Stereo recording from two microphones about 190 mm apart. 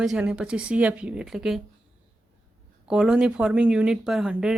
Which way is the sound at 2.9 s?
5° right (ahead or behind).